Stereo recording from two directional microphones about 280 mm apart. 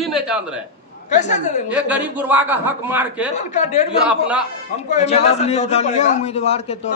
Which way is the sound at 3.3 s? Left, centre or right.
Left.